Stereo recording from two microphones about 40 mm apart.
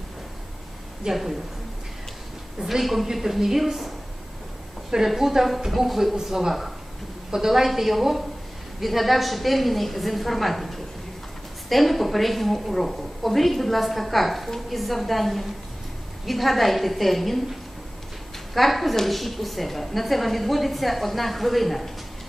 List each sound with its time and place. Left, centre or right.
1.1 s a woman's voice: centre
2.6 s a woman's voice: centre